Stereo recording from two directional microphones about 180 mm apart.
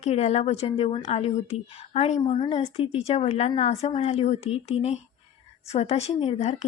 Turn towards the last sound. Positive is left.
turn(degrees=40)  # may be behind; listen again after turning